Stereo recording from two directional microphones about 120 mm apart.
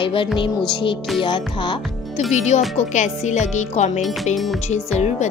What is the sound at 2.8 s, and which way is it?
Speech, 80° left.